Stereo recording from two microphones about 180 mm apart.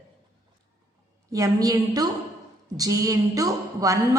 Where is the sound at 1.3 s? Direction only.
20° right (ahead or behind).